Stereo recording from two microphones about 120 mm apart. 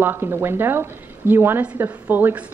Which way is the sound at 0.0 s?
20° right (ahead or behind).